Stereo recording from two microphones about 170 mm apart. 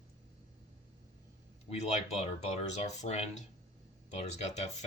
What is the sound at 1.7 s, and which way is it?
Speech, 40° left (ahead or behind).